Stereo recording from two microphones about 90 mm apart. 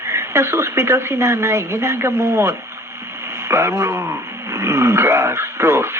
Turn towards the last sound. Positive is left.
turn(degrees=-30)  # may be behind; listen again after turning